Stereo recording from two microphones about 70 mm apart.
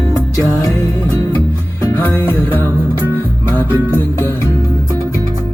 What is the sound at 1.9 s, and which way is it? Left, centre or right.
Music, left.